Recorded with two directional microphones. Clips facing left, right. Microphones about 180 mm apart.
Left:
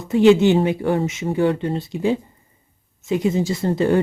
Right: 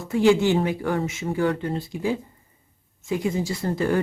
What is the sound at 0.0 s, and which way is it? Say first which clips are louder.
A woman's voice: left 5 dB; 20° left (ahead or behind).